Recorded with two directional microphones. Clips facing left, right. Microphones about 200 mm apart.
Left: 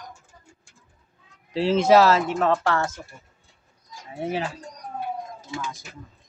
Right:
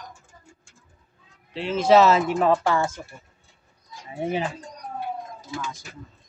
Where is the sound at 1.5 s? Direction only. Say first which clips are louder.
Left 5 dB; 35° left (ahead or behind).